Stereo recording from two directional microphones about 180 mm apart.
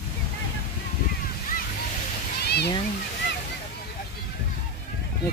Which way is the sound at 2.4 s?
65° left (ahead or behind).